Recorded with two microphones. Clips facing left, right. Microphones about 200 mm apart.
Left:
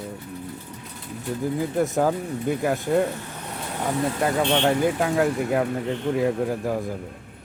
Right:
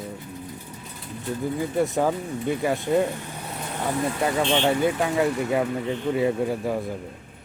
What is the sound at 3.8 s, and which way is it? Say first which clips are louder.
Speech: left 1 dB; centre (ahead or behind).